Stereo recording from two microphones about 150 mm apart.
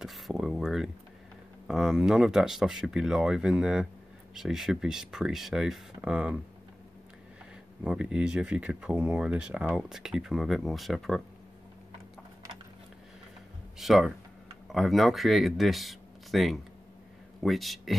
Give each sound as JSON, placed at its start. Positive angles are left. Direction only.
{"t": 0.0, "sound": "a sound", "side_deg": 0}
{"t": 1.7, "sound": "speech", "side_deg": -5}
{"t": 7.8, "sound": "speech", "side_deg": -5}
{"t": 13.7, "sound": "speech", "side_deg": 0}